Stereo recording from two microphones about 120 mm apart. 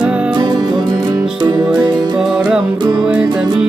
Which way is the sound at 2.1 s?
5° right (ahead or behind).